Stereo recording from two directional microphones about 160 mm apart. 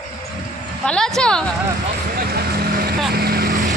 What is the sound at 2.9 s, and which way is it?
Boat, 75° right (ahead or behind).